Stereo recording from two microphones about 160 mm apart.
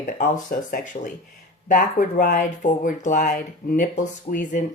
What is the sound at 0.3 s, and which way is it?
Speech, 55° left (ahead or behind).